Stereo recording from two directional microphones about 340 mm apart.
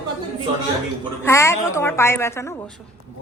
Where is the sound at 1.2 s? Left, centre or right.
Centre.